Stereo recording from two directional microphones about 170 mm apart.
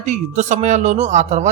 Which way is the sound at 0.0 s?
45° right (ahead or behind).